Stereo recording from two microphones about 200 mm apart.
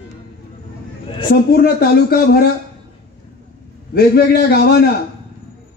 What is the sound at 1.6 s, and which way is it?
Speech, 50° left (ahead or behind).